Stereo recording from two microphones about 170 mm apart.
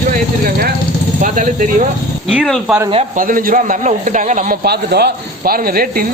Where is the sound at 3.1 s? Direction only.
55° right (ahead or behind).